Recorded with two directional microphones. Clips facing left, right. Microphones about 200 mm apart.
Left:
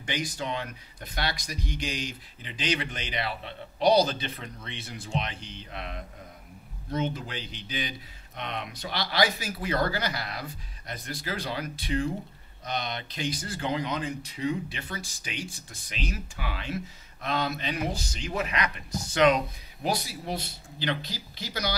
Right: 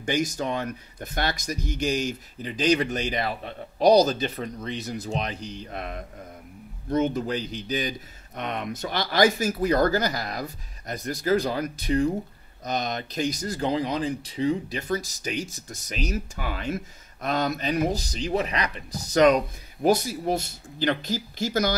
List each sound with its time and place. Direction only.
0.0 s speech: 45° right (ahead or behind)